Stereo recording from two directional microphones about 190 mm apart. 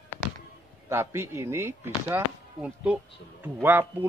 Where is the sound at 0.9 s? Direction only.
15° right (ahead or behind).